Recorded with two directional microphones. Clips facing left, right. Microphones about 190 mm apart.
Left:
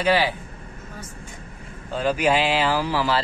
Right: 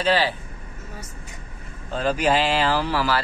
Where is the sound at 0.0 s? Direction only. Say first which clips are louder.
Left 1 dB; 10° left (ahead or behind).